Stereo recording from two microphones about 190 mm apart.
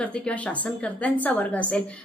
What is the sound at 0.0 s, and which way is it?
A woman's voice, 5° left (ahead or behind).